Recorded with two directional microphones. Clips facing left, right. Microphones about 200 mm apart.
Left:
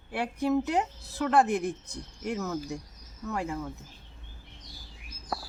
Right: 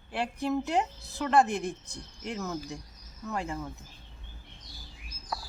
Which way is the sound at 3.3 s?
5° left (ahead or behind).